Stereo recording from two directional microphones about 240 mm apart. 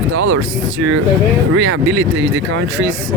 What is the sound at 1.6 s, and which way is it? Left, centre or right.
Speech, right.